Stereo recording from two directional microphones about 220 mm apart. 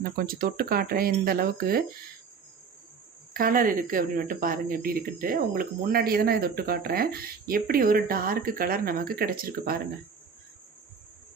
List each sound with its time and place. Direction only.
0.0 s speech: 40° right (ahead or behind)
3.3 s speech: 40° right (ahead or behind)